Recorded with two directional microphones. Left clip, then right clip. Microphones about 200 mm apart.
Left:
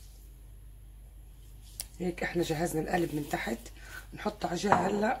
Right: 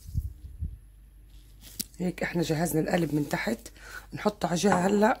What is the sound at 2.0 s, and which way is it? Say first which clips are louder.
Speech: right 1 dB; 55° right (ahead or behind).